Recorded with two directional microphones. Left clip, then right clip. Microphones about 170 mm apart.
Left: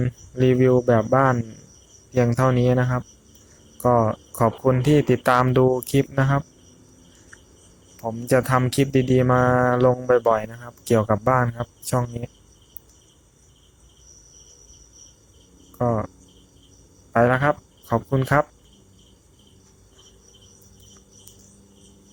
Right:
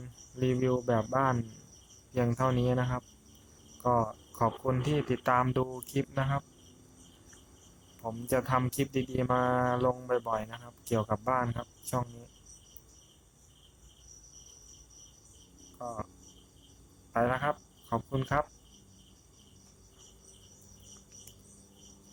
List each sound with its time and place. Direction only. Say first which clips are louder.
0.0 s speech: left 13 dB; 20° left (ahead or behind)
7.9 s speech: left 11 dB; 20° left (ahead or behind)
17.1 s speech: left 11 dB; 25° left (ahead or behind)